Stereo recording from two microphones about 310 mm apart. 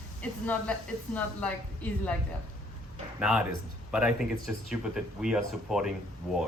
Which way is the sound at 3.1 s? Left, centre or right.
Centre.